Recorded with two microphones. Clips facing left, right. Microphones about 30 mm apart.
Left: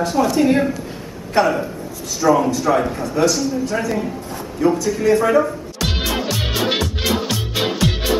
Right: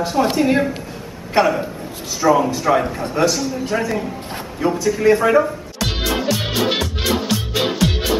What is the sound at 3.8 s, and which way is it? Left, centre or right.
Speech, centre.